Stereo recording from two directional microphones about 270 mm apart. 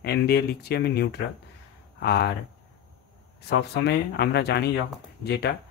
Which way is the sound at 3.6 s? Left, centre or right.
Left.